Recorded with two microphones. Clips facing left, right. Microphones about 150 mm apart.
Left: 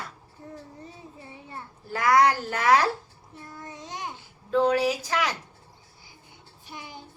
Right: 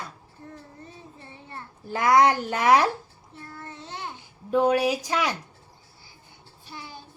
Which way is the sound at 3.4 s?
15° left (ahead or behind).